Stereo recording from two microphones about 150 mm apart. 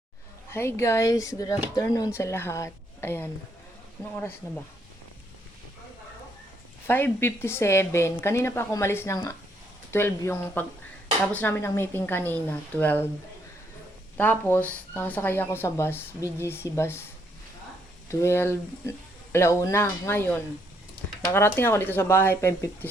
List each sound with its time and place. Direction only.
0.5 s speech: 15° left (ahead or behind)
6.8 s speech: 15° left (ahead or behind)
14.2 s speech: 10° left (ahead or behind)
18.1 s speech: 15° left (ahead or behind)